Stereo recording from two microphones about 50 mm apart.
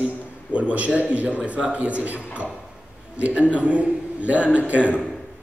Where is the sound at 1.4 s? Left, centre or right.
Right.